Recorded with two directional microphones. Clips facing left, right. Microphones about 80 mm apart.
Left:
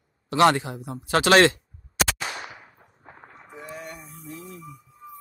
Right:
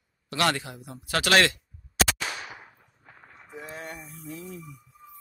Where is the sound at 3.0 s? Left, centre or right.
Left.